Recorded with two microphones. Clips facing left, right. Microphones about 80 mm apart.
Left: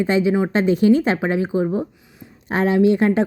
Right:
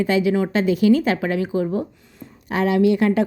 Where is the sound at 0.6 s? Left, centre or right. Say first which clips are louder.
Left 1 dB; left.